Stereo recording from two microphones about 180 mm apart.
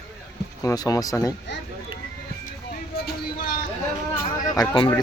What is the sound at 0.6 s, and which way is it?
Speech, 20° left (ahead or behind).